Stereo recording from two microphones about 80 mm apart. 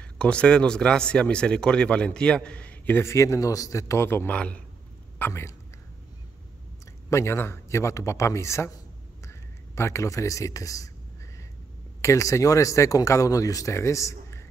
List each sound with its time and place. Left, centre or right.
0.0 s speech: centre
3.0 s speech: left
4.3 s speech: centre
5.2 s speech: left
7.1 s speech: left
12.0 s speech: left